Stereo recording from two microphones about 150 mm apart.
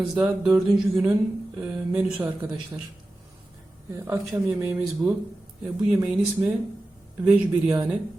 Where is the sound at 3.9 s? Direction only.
20° right (ahead or behind).